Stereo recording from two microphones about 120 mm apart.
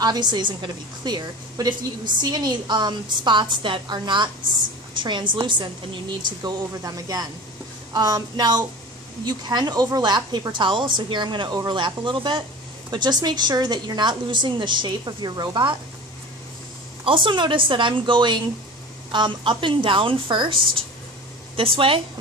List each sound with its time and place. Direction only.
0.0 s a woman's voice: 35° right (ahead or behind)
17.0 s a woman's voice: 45° right (ahead or behind)